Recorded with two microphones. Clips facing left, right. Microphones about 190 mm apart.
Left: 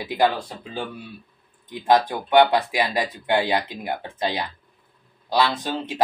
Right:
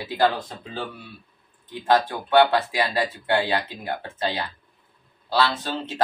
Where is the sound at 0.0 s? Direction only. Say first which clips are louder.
Left 1 dB; 15° left (ahead or behind).